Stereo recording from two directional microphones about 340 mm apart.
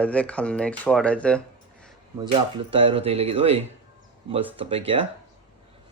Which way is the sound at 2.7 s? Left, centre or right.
Centre.